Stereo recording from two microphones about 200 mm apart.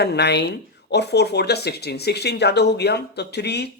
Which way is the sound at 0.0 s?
55° left (ahead or behind).